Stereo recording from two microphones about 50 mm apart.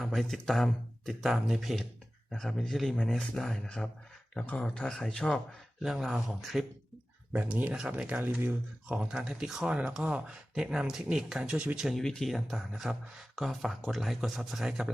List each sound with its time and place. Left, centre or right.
0.0 s speech: centre
4.4 s speech: left
5.8 s speech: centre
7.8 s speech: right
8.2 s speech: right
8.4 s speech: right
9.0 s speech: centre
9.6 s speech: right
11.5 s speech: right
11.9 s speech: centre
12.3 s speech: centre